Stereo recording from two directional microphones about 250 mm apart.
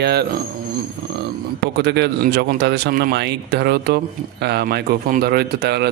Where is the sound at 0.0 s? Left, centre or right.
Right.